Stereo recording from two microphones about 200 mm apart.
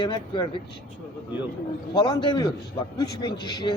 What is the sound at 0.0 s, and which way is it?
Speech, 25° left (ahead or behind).